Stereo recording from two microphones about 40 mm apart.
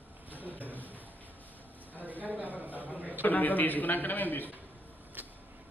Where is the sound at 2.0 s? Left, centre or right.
Right.